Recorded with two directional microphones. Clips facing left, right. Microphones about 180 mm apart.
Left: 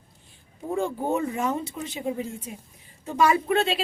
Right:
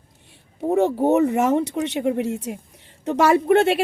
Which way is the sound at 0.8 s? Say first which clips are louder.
Right 9 dB; 75° right (ahead or behind).